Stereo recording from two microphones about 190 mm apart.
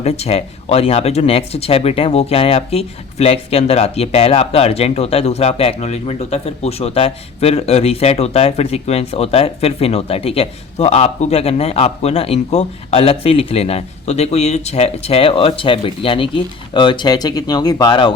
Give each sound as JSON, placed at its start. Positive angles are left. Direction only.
{"t": 0.0, "sound": "speech", "side_deg": 35}